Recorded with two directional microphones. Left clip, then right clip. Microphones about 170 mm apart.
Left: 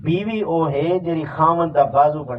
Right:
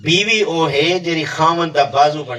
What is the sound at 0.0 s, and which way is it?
A man's voice, 30° right (ahead or behind).